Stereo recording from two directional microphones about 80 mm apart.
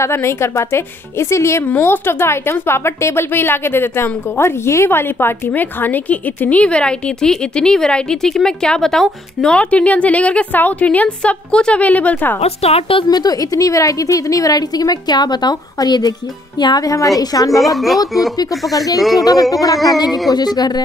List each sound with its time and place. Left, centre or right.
0.0 s a woman's voice: left
12.9 s a woman's voice: left
17.6 s a woman's voice: centre
19.1 s a woman's voice: left